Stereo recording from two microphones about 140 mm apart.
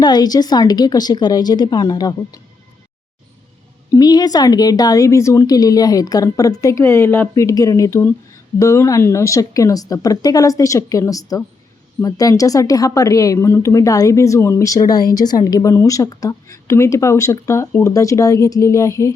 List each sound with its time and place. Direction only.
0.0 s speech: 30° left (ahead or behind)
3.9 s speech: 30° left (ahead or behind)